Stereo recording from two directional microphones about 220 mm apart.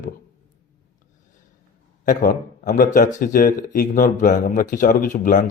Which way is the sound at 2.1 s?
40° left (ahead or behind).